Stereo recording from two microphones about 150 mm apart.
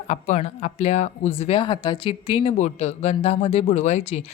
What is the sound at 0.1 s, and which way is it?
Speech, 45° left (ahead or behind).